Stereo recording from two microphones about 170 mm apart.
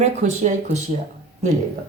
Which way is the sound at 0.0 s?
40° right (ahead or behind).